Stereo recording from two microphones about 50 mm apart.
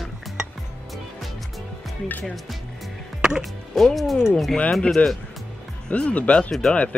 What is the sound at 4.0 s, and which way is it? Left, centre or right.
Speech, centre.